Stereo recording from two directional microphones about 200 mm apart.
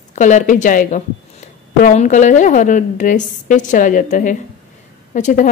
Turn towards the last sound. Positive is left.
turn(degrees=40)  # may be behind; listen again after turning